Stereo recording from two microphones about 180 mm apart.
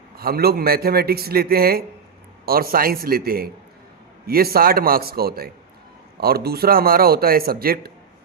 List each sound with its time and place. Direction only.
0.2 s a man's voice: 55° right (ahead or behind)